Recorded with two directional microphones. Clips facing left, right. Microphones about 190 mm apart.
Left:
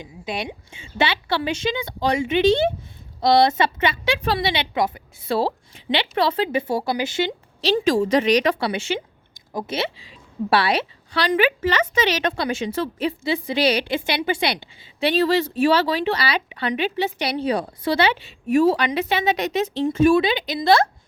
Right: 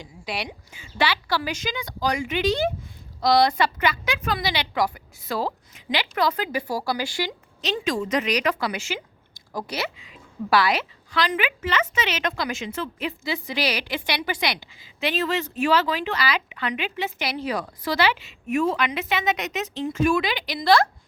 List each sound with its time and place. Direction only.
0.0 s a woman's voice: 20° left (ahead or behind)